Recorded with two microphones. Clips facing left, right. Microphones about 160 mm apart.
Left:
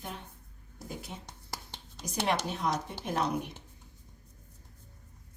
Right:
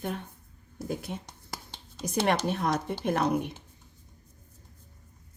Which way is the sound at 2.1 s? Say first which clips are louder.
Right 5 dB; 55° right (ahead or behind).